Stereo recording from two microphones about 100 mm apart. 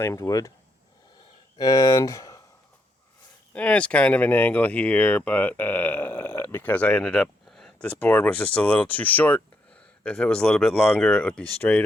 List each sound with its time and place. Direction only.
0.0 s speech: 35° left (ahead or behind)
1.5 s speech: 35° left (ahead or behind)
3.5 s speech: 15° left (ahead or behind)